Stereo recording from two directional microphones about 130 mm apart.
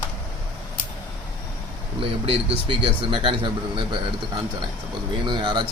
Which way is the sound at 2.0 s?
45° right (ahead or behind).